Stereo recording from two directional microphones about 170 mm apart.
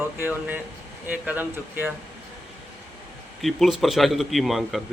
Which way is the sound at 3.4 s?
Centre (ahead or behind).